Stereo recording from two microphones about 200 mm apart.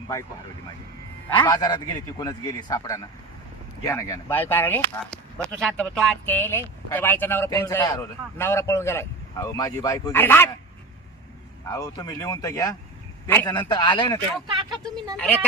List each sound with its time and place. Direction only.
1.4 s a man's voice: 20° left (ahead or behind)
11.7 s a man's voice: 20° left (ahead or behind)
14.4 s speech: 25° right (ahead or behind)
15.1 s speech: 5° left (ahead or behind)